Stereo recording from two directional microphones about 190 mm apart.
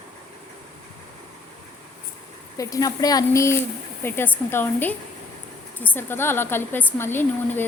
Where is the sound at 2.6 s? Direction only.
20° left (ahead or behind).